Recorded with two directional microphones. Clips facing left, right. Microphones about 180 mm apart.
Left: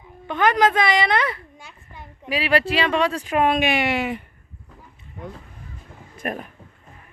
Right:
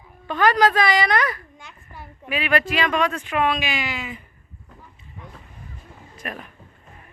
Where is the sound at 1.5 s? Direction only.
10° left (ahead or behind).